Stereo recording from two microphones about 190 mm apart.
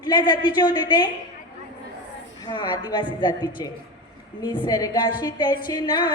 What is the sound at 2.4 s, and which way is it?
A woman's voice, 25° left (ahead or behind).